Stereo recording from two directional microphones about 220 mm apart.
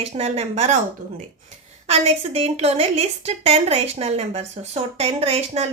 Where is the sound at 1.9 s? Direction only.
30° right (ahead or behind).